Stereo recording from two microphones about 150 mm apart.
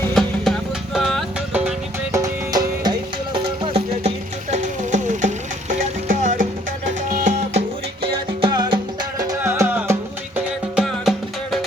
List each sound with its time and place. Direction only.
0.1 s music: centre (ahead or behind)
2.1 s music: 25° right (ahead or behind)
3.3 s music: 35° right (ahead or behind)
4.5 s music: 55° right (ahead or behind)
7.1 s music: 50° right (ahead or behind)
8.4 s music: 30° right (ahead or behind)
9.4 s music: 15° right (ahead or behind)